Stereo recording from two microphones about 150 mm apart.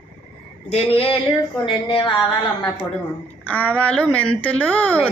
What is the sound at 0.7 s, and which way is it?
Speech, 40° left (ahead or behind).